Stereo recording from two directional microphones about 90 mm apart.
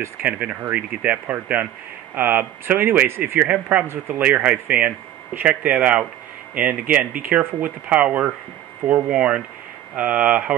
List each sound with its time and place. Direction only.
0.0 s speech: 15° right (ahead or behind)
3.8 s speech: 25° right (ahead or behind)
4.2 s speech: 10° right (ahead or behind)